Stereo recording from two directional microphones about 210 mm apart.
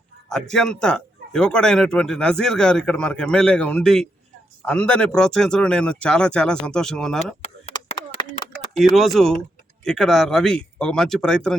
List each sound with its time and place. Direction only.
0.3 s speech: 5° left (ahead or behind)
7.4 s a sound: 30° left (ahead or behind)
8.7 s speech: centre (ahead or behind)